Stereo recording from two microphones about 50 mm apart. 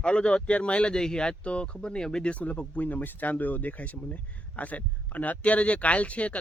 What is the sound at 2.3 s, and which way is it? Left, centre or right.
Speech, left.